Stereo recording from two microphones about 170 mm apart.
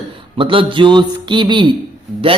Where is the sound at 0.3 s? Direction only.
30° right (ahead or behind).